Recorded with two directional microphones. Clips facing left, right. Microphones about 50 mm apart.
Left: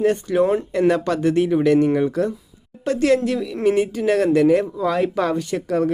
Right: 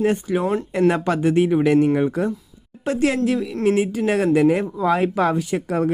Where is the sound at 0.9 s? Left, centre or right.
Right.